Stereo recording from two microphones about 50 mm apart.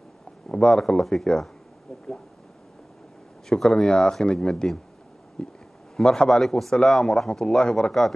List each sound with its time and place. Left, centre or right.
0.5 s a man's voice: centre
3.4 s a man's voice: centre